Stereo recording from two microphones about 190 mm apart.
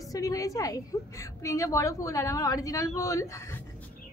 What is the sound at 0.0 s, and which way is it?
A woman's voice, 20° left (ahead or behind).